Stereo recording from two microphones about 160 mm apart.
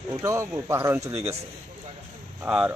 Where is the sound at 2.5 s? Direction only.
5° right (ahead or behind).